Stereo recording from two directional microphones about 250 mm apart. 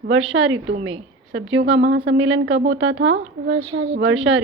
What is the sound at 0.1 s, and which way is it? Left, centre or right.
A woman's voice, right.